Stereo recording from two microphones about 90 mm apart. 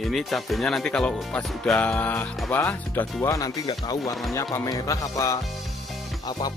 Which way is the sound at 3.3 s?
45° left (ahead or behind).